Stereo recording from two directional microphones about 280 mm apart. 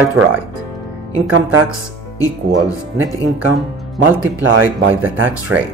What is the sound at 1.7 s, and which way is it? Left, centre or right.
Speech, centre.